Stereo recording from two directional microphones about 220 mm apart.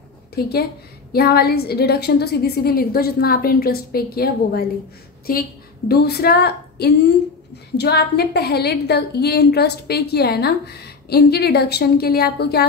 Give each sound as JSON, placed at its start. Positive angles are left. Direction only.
{"t": 0.3, "sound": "a woman's voice", "side_deg": 45}